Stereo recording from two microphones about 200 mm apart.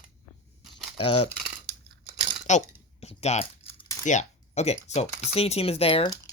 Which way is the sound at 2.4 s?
35° left (ahead or behind).